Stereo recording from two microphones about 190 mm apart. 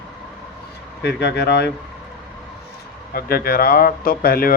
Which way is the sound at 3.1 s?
50° left (ahead or behind).